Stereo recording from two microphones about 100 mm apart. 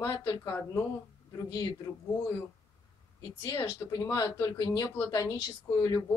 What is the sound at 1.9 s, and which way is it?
Speech, 25° left (ahead or behind).